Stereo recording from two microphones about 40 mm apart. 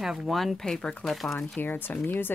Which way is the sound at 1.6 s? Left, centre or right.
Left.